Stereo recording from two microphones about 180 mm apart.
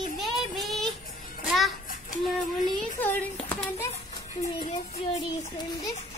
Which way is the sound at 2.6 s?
10° left (ahead or behind).